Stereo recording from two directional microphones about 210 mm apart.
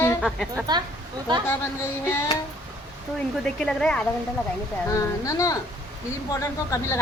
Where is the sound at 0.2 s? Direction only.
Centre (ahead or behind).